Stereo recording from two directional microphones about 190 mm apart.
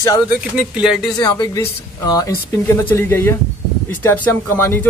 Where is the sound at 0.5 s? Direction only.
5° right (ahead or behind).